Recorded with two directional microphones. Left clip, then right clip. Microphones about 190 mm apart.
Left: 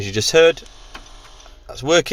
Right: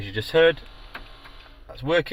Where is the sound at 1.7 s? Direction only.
75° left (ahead or behind).